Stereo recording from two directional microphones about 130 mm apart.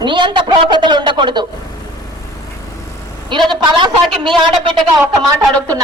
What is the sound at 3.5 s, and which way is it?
Speech, 35° right (ahead or behind).